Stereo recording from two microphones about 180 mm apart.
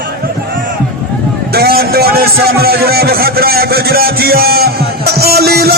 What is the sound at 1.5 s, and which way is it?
A man's voice, 60° right (ahead or behind).